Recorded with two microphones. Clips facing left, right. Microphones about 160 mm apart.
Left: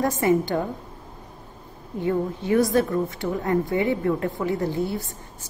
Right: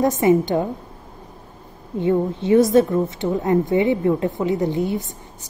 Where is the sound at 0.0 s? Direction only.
20° right (ahead or behind).